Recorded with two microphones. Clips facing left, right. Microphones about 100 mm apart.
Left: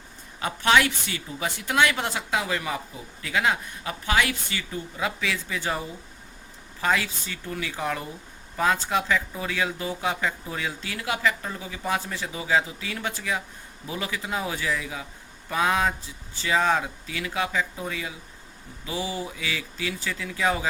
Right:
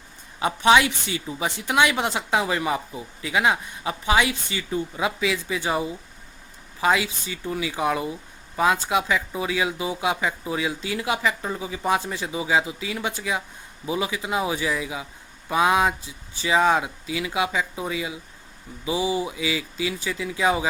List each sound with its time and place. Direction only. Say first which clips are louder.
0.3 s speech: right 4 dB; 15° right (ahead or behind)
6.8 s speech: right 3 dB; 15° right (ahead or behind)